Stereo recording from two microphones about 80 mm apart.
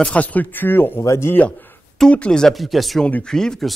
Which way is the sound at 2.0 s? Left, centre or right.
Centre.